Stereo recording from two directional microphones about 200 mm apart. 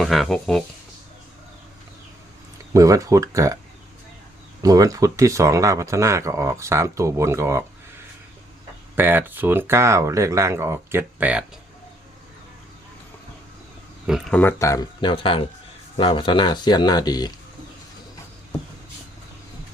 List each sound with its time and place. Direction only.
0.0 s speech: centre (ahead or behind)
2.7 s speech: 15° right (ahead or behind)
4.6 s speech: 15° right (ahead or behind)
9.0 s speech: 10° right (ahead or behind)
14.1 s speech: 5° left (ahead or behind)